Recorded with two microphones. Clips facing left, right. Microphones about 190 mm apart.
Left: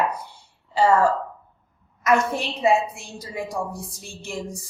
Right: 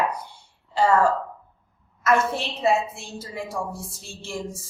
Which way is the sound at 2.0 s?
15° left (ahead or behind).